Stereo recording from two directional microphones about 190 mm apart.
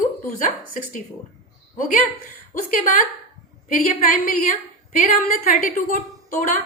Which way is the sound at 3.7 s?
45° left (ahead or behind).